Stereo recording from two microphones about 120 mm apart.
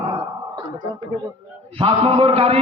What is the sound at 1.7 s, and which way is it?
Speech, 50° right (ahead or behind).